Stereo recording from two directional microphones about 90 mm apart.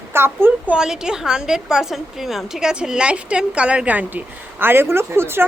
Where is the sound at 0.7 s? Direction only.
5° right (ahead or behind).